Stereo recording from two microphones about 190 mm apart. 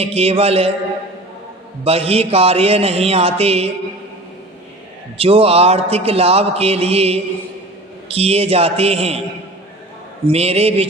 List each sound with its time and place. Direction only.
0.0 s a man's voice: 30° right (ahead or behind)
1.8 s a man's voice: 30° right (ahead or behind)
5.1 s a man's voice: 30° right (ahead or behind)
10.2 s a man's voice: 35° right (ahead or behind)